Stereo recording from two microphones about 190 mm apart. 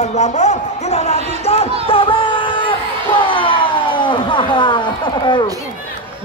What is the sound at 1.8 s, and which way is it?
Music, 30° left (ahead or behind).